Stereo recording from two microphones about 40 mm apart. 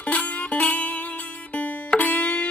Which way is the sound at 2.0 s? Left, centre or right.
Left.